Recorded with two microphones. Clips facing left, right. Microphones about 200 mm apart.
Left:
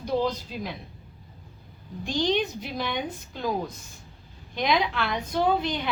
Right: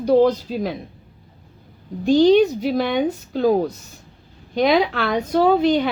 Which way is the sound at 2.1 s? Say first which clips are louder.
Right 12 dB; 45° right (ahead or behind).